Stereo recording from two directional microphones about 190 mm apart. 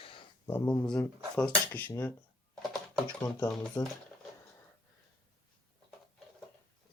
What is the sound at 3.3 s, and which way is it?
Speech, 5° left (ahead or behind).